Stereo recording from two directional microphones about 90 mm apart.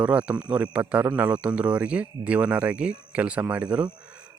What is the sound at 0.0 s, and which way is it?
A man's voice, 15° right (ahead or behind).